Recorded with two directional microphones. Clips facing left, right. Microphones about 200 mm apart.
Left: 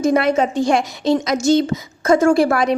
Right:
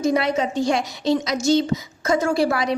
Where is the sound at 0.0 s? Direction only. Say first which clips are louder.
Left 4 dB; 55° left (ahead or behind).